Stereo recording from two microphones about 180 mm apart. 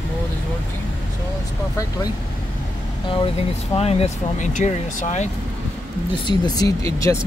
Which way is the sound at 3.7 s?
35° left (ahead or behind).